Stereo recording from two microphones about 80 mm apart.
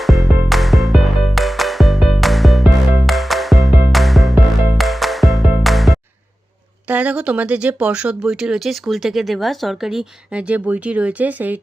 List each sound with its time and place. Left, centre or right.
0.0 s music: centre
6.8 s speech: centre
10.5 s speech: centre